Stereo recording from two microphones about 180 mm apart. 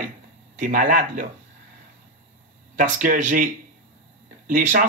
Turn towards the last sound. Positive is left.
turn(degrees=-45)  # may be behind; listen again after turning